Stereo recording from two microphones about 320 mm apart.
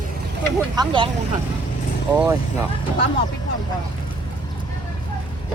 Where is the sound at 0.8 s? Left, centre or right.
Centre.